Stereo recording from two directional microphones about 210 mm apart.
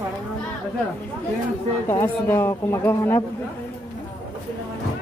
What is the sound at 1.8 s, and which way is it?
Speech, 10° left (ahead or behind).